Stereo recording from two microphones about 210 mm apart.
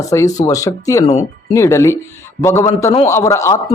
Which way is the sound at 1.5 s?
15° left (ahead or behind).